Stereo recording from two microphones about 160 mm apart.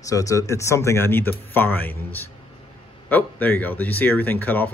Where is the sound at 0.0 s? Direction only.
20° left (ahead or behind).